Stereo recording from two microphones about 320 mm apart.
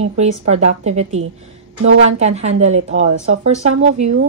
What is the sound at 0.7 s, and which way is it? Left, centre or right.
Speech, right.